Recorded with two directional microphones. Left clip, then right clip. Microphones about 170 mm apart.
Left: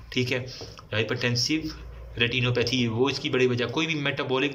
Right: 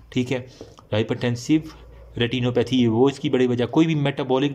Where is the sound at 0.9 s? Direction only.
35° right (ahead or behind).